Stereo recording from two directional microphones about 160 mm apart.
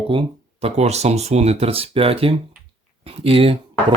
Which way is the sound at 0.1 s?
35° right (ahead or behind).